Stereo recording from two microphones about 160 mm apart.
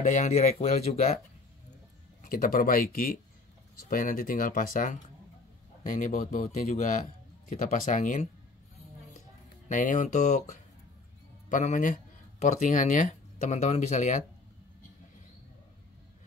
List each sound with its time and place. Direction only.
0.0 s speech: 50° left (ahead or behind)
2.2 s speech: 60° left (ahead or behind)
9.7 s speech: 55° left (ahead or behind)